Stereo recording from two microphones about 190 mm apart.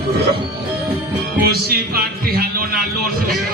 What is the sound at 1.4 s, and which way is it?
Music, 55° right (ahead or behind).